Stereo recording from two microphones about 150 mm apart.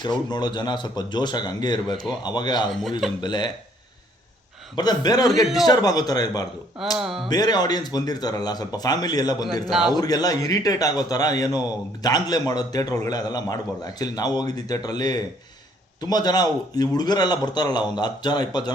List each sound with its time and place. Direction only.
0.0 s a man's voice: 30° left (ahead or behind)
4.7 s a man's voice: 25° left (ahead or behind)
5.3 s a man's voice: centre (ahead or behind)
5.6 s a man's voice: 25° left (ahead or behind)
7.0 s a man's voice: centre (ahead or behind)
7.3 s a man's voice: 25° left (ahead or behind)
9.6 s a man's voice: centre (ahead or behind)
9.9 s a man's voice: 25° left (ahead or behind)